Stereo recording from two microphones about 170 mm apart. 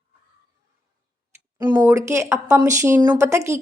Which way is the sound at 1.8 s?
15° right (ahead or behind).